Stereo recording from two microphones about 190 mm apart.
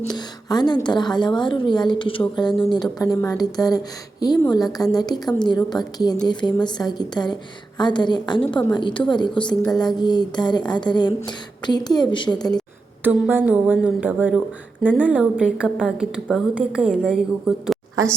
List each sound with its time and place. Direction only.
0.1 s a woman's voice: 20° left (ahead or behind)
13.1 s a woman's voice: 10° right (ahead or behind)